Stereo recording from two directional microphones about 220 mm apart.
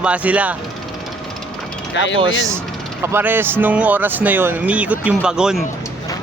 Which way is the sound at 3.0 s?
10° right (ahead or behind).